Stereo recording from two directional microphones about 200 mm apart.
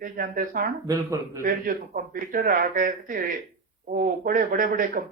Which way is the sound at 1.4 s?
45° right (ahead or behind).